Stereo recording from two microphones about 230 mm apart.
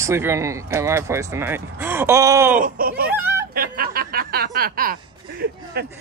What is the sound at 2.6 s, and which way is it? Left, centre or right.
Speech, right.